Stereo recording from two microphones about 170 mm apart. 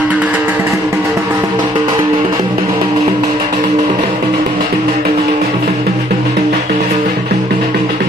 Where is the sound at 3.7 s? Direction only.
45° right (ahead or behind).